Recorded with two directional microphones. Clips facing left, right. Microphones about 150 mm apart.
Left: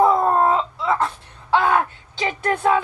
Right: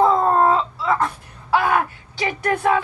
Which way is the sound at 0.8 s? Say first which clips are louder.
Even; 25° left (ahead or behind).